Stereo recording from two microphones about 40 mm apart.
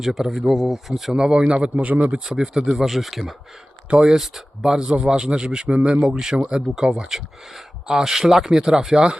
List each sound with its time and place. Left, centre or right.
0.0 s speech: centre
1.1 s speech: right
1.7 s speech: right
2.2 s speech: centre
2.7 s speech: centre; by 6.1 s right
6.1 s speech: centre